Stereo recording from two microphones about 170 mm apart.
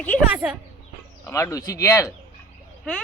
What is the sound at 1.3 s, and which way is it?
Speech, 15° left (ahead or behind).